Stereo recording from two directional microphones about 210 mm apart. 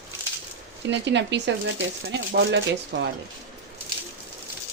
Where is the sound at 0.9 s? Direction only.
55° right (ahead or behind).